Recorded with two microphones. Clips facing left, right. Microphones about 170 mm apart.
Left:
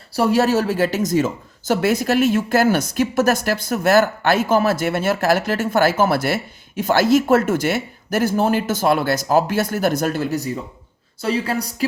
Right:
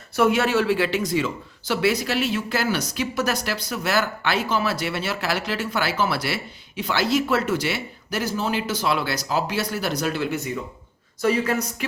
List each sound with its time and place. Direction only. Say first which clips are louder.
0.1 s speech: left 3 dB; 35° left (ahead or behind)